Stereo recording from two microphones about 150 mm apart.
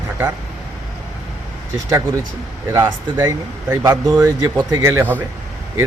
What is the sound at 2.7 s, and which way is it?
Speech, 20° right (ahead or behind).